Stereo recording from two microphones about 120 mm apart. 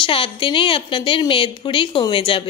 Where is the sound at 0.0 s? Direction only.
45° left (ahead or behind).